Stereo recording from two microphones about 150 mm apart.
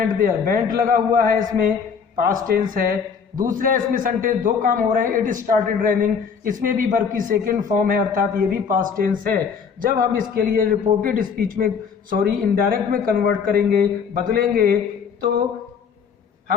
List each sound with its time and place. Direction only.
0.1 s a man's voice: 70° right (ahead or behind)